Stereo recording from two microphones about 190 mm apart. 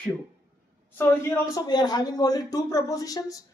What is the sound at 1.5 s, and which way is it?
Speech, 20° left (ahead or behind).